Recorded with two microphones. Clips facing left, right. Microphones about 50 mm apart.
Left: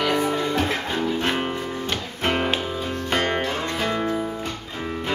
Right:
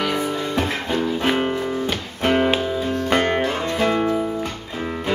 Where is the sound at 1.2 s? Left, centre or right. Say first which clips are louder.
Right 4 dB; centre.